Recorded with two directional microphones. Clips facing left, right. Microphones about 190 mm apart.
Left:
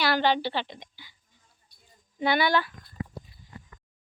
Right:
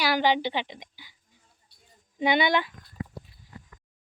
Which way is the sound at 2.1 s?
20° right (ahead or behind).